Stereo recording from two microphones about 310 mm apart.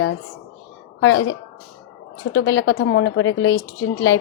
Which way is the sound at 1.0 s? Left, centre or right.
Left.